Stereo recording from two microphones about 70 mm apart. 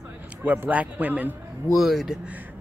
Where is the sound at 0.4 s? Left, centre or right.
Right.